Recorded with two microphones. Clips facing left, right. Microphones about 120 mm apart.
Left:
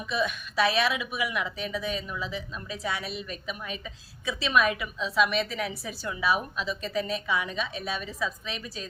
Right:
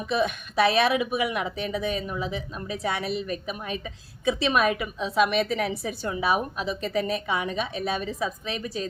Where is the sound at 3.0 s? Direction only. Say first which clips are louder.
Right 7 dB; 55° right (ahead or behind).